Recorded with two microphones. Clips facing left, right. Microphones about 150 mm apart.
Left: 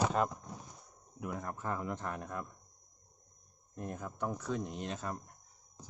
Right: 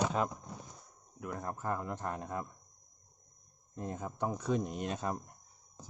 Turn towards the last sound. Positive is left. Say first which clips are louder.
# right 3 dB
turn(degrees=-15)  # may be behind; listen again after turning